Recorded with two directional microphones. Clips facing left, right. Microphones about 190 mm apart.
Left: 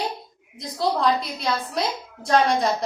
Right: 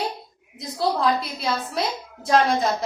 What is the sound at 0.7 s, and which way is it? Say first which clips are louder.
A woman's voice: even; centre (ahead or behind).